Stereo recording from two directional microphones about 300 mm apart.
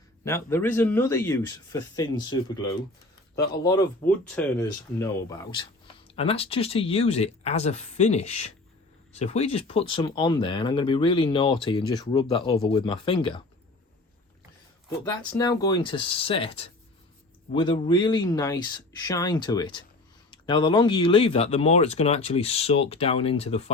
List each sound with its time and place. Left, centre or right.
0.3 s speech: centre
14.8 s speech: centre